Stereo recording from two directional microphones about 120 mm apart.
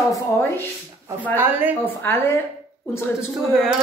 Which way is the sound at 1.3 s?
15° right (ahead or behind).